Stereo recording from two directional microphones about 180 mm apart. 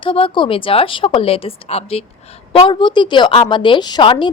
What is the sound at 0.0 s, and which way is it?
A woman's voice, 30° left (ahead or behind).